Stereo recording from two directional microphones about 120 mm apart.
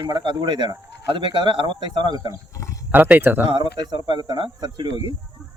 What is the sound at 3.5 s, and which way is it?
Speech, 40° right (ahead or behind).